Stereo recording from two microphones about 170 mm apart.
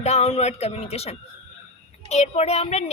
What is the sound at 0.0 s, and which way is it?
A woman's voice, 40° left (ahead or behind).